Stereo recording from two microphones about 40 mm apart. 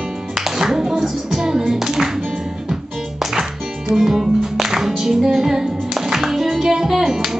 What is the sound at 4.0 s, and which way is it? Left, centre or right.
Music, centre.